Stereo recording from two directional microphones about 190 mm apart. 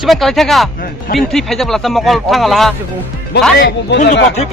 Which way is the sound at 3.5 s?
60° left (ahead or behind).